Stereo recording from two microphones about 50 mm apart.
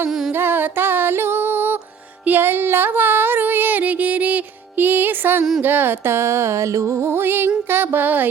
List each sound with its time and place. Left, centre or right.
0.3 s music: right
5.6 s speech: right
6.1 s music: right
7.2 s speech: right
7.7 s music: right